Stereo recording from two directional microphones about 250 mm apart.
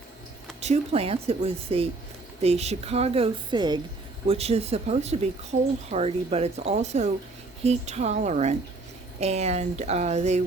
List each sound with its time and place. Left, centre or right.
0.6 s speech: right